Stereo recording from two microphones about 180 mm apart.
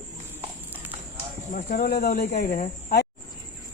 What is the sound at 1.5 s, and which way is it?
Speech, 50° left (ahead or behind).